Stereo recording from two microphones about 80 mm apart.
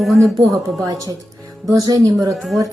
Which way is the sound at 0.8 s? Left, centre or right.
Right.